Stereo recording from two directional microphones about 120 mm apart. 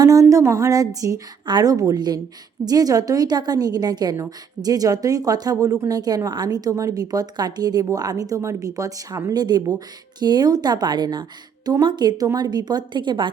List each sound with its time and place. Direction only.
0.0 s a woman's voice: 25° right (ahead or behind)